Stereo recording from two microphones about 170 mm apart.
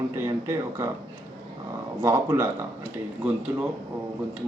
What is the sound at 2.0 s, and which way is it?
Speech, 15° right (ahead or behind).